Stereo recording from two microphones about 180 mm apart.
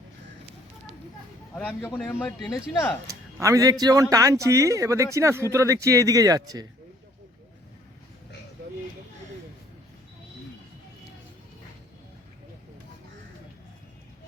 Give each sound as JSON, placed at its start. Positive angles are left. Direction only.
{"t": 1.5, "sound": "a man's voice", "side_deg": 10}
{"t": 3.3, "sound": "a man's voice", "side_deg": -15}